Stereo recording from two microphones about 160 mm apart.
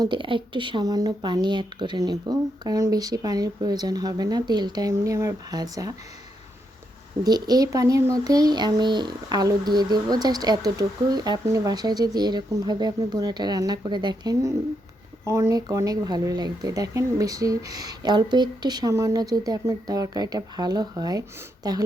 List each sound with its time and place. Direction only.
0.0 s speech: 30° right (ahead or behind)
7.3 s speech: 25° right (ahead or behind)